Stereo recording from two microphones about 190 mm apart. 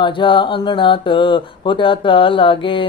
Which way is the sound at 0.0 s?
25° left (ahead or behind).